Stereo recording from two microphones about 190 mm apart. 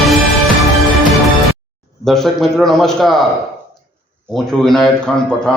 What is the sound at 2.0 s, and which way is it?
A man's voice, centre (ahead or behind).